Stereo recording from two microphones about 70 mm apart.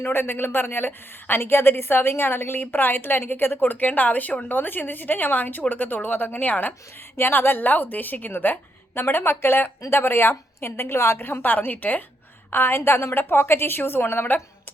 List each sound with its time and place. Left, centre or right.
0.0 s a woman's voice: left